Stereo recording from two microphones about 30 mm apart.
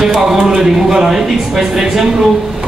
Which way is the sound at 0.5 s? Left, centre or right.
Right.